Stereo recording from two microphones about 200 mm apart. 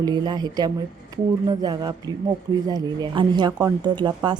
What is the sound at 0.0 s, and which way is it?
A woman's voice, 20° right (ahead or behind).